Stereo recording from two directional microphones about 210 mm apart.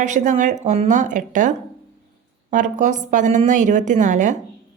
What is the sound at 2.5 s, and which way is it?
A woman's voice, 35° right (ahead or behind).